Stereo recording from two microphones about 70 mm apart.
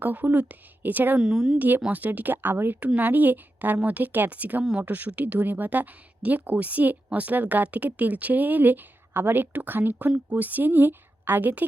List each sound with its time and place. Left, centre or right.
0.0 s speech: right
1.2 s a woman's voice: centre
1.5 s speech: right